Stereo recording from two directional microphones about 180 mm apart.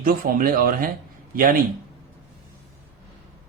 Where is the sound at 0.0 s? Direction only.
50° right (ahead or behind).